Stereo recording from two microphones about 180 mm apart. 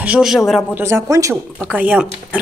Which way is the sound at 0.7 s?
15° right (ahead or behind).